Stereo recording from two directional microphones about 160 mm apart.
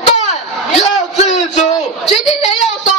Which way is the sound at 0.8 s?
45° left (ahead or behind).